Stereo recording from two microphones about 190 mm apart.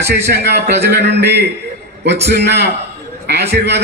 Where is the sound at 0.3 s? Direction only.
60° right (ahead or behind).